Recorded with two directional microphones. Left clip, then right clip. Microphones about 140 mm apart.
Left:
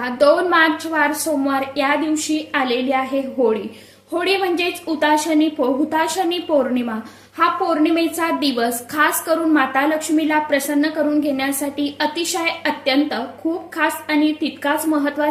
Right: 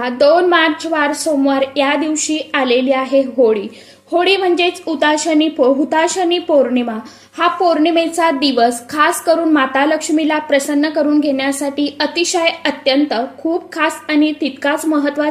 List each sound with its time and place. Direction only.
0.0 s a woman's voice: 30° right (ahead or behind)